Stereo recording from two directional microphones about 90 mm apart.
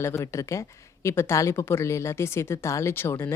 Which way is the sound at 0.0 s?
30° left (ahead or behind).